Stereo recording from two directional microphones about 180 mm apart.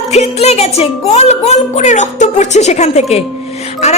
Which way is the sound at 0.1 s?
35° left (ahead or behind).